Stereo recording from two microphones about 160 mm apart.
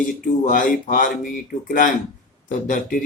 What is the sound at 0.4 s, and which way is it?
Mantra, 55° left (ahead or behind).